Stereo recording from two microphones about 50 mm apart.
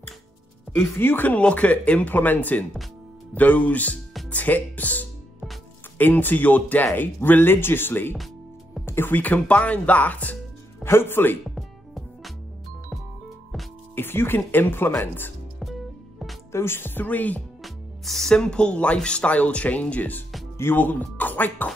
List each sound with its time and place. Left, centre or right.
0.7 s speech: left
1.4 s speech: left
8.8 s music: left
9.1 s speech: left
10.8 s speech: left
11.5 s music: centre
13.9 s speech: left
16.5 s speech: left
17.6 s music: centre
18.4 s speech: centre; by 21.6 s left